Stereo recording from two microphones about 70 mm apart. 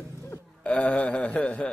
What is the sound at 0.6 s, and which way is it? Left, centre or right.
A man's voice, centre.